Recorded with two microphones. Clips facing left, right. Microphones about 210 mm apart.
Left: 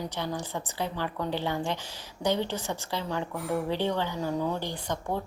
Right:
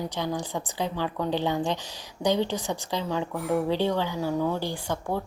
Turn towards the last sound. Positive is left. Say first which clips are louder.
# right 3 dB
turn(degrees=-10)  # may be behind; listen again after turning